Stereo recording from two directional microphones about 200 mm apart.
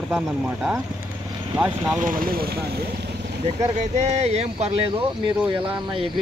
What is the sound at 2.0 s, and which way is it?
Speech, 45° right (ahead or behind).